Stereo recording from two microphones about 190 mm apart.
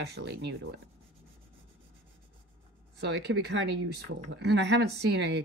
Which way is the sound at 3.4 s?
70° right (ahead or behind).